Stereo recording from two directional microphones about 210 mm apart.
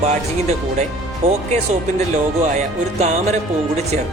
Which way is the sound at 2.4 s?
35° right (ahead or behind).